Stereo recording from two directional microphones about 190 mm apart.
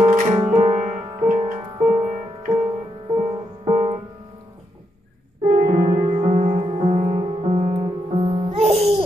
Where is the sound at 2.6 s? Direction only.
25° right (ahead or behind).